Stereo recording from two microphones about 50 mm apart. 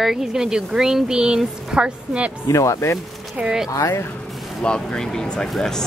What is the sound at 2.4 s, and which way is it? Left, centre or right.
Speech, left.